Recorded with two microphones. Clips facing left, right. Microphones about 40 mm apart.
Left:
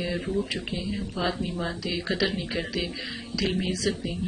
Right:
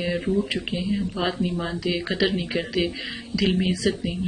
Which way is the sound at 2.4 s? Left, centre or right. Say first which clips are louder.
Right 5 dB; centre.